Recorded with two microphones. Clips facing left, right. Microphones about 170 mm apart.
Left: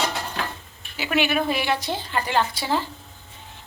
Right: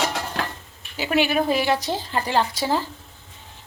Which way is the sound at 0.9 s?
40° right (ahead or behind).